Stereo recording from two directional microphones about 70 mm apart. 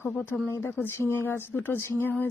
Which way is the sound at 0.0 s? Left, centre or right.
Left.